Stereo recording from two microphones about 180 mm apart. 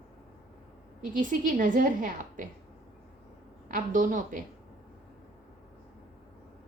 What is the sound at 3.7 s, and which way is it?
Speech, 45° right (ahead or behind).